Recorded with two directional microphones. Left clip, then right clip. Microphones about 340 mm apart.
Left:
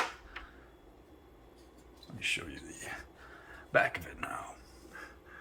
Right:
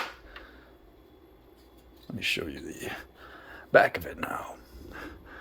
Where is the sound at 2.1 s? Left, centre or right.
Centre.